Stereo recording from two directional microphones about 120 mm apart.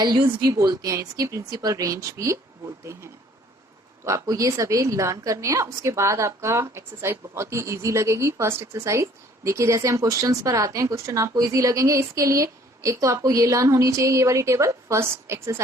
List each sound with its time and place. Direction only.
0.0 s a woman's voice: 30° right (ahead or behind)